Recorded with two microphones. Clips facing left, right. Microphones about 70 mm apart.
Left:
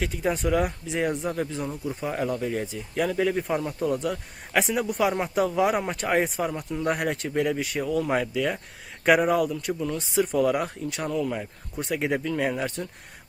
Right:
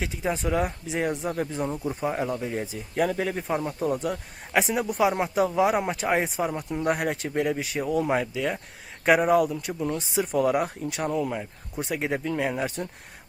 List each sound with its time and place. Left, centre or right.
0.0 s speech: centre
1.5 s speech: right
2.0 s speech: centre
7.9 s speech: centre
8.1 s speech: centre